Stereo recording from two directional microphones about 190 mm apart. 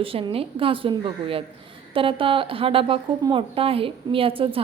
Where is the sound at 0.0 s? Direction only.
30° right (ahead or behind).